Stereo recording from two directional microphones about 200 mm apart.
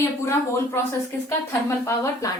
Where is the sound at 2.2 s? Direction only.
15° left (ahead or behind).